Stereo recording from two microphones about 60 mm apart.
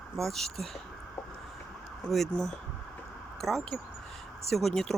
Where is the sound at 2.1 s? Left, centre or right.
Centre.